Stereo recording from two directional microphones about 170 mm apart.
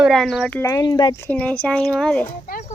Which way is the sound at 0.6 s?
20° left (ahead or behind).